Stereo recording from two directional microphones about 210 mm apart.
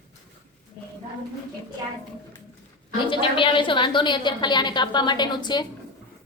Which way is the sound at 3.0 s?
25° left (ahead or behind).